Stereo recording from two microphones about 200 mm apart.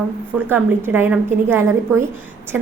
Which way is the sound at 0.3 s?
10° right (ahead or behind).